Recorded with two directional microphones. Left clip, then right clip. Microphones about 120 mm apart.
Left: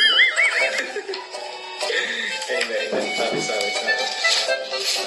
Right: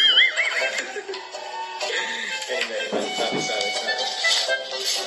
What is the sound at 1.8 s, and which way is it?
Speech, 20° left (ahead or behind).